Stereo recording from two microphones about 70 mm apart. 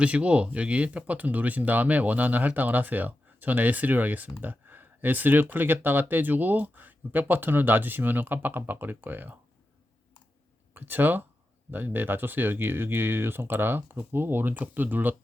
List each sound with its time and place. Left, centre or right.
0.0 s speech: centre
10.8 s speech: right